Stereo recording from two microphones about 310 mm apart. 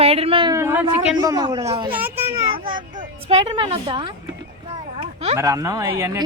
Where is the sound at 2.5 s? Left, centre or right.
Right.